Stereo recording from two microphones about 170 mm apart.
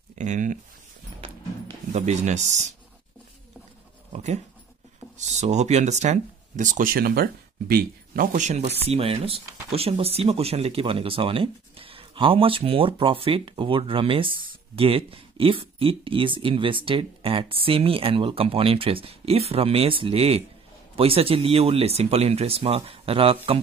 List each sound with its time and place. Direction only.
0.2 s speech: 45° right (ahead or behind)
1.9 s speech: 40° right (ahead or behind)
4.1 s speech: 40° right (ahead or behind)